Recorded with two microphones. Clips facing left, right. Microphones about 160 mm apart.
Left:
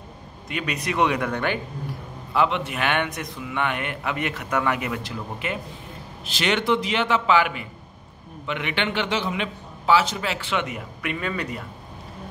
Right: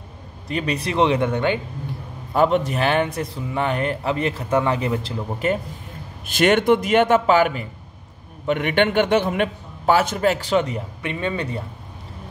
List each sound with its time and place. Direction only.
0.5 s speech: 35° right (ahead or behind)
2.3 s a man's voice: 45° right (ahead or behind)
6.2 s a man's voice: 50° right (ahead or behind); by 11.6 s 30° right (ahead or behind)